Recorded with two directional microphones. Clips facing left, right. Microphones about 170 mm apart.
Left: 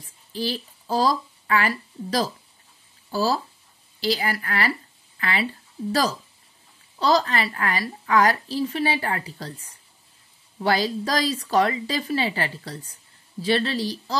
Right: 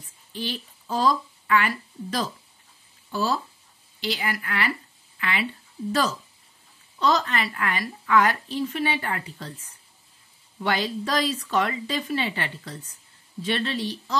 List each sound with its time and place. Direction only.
0.3 s a woman's voice: 35° left (ahead or behind)